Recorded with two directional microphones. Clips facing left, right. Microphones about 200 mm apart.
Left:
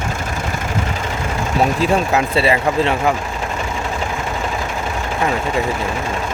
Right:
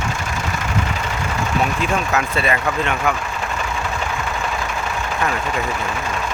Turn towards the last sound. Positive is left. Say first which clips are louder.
# left 3 dB
turn(degrees=25)  # may be behind; listen again after turning